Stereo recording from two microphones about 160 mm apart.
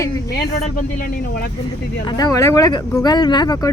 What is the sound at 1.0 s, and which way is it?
Speech, 70° left (ahead or behind).